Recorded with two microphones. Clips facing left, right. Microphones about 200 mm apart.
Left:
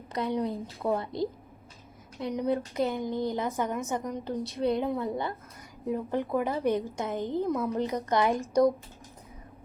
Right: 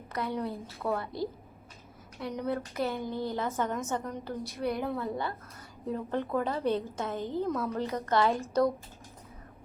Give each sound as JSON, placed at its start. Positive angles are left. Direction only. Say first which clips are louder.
{"t": 0.1, "sound": "a woman's voice", "louder": "left 4 dB", "side_deg": 15}